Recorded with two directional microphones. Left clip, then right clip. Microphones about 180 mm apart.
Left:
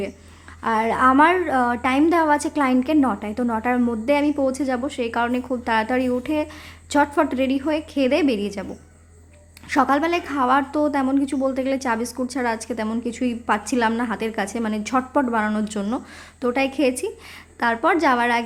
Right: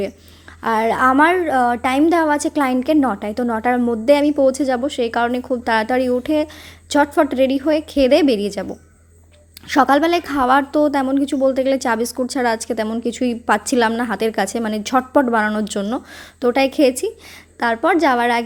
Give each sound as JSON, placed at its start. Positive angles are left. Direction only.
{"t": 0.6, "sound": "a woman's voice", "side_deg": -20}
{"t": 9.6, "sound": "a woman's voice", "side_deg": -20}